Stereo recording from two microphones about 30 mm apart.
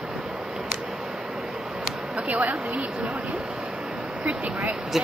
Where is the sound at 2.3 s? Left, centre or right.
Right.